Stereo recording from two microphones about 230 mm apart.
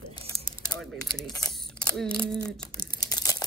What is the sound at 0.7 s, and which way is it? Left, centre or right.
Speech, centre.